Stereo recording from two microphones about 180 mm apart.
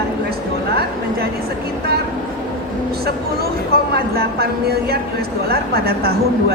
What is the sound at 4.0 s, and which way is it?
A woman's voice, 60° right (ahead or behind).